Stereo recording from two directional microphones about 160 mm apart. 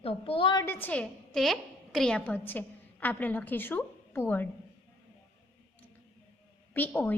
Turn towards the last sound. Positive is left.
turn(degrees=10)  # may be behind; listen again after turning